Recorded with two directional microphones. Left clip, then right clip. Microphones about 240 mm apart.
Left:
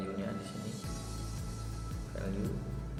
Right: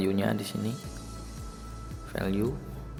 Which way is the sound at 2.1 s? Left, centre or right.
Right.